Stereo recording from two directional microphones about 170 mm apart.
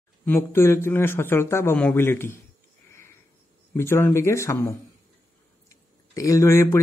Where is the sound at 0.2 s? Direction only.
15° left (ahead or behind).